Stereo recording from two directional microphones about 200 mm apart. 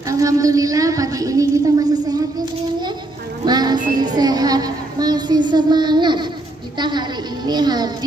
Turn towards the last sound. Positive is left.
turn(degrees=-20)  # may be behind; listen again after turning